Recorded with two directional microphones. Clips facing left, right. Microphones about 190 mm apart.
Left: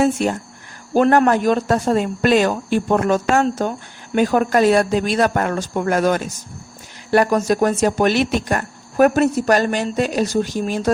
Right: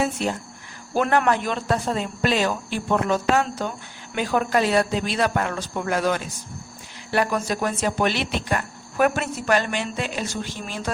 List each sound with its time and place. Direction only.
0.9 s speech: 40° left (ahead or behind)